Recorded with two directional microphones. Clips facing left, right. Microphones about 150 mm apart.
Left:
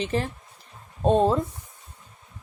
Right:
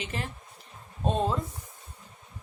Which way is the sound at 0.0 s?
35° left (ahead or behind).